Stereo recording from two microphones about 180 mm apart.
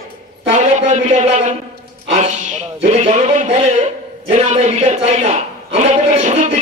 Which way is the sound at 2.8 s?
35° right (ahead or behind).